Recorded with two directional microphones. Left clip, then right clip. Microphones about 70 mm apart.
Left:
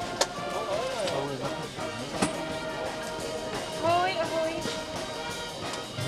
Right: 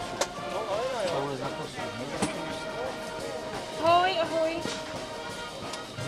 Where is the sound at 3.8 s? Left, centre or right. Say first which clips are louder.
Right 3 dB; right.